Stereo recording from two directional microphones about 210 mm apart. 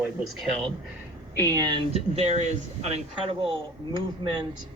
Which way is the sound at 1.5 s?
20° right (ahead or behind).